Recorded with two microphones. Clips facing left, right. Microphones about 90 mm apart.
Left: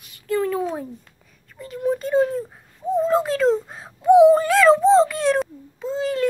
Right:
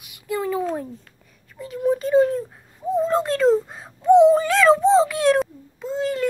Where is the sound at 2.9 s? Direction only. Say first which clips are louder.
Left 1 dB; centre (ahead or behind).